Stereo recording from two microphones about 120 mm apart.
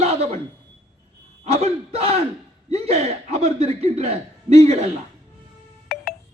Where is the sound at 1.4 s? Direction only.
60° right (ahead or behind).